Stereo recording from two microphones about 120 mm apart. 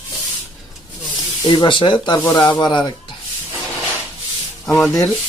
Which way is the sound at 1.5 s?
40° left (ahead or behind).